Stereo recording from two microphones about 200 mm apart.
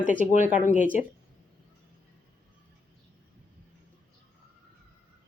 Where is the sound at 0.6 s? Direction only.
40° left (ahead or behind).